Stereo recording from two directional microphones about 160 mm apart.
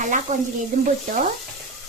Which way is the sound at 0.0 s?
50° right (ahead or behind).